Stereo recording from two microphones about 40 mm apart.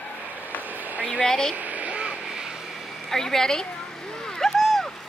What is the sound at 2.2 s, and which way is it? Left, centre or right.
Vehicle, centre.